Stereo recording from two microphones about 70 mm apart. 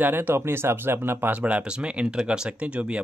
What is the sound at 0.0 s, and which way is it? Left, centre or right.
Speech, right.